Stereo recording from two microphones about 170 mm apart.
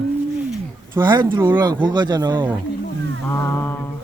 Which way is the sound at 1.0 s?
25° right (ahead or behind).